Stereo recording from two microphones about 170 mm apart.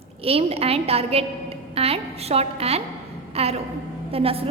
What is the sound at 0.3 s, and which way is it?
A woman's voice, 35° right (ahead or behind).